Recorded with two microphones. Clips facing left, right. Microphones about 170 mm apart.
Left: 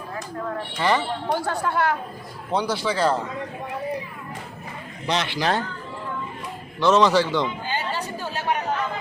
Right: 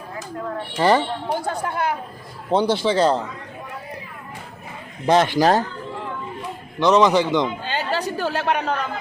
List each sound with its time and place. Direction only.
0.8 s speech: 35° right (ahead or behind)
1.4 s speech: 20° right (ahead or behind)
5.0 s speech: 50° right (ahead or behind)
6.7 s a man's voice: 15° right (ahead or behind)
7.6 s speech: 75° right (ahead or behind)